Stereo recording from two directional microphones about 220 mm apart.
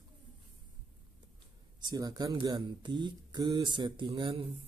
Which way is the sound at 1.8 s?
20° right (ahead or behind).